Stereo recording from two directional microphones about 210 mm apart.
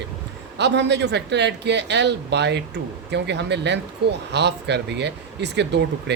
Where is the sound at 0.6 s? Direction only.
55° right (ahead or behind).